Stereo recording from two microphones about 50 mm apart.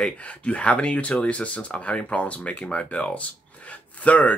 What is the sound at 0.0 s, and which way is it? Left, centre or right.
Speech, left.